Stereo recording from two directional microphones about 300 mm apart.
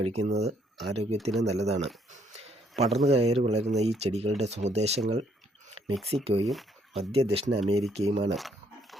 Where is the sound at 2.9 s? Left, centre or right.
Right.